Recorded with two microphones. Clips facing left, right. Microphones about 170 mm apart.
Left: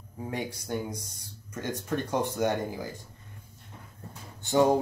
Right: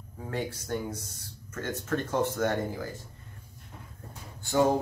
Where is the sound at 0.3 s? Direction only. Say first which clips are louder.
Right 1 dB; 15° left (ahead or behind).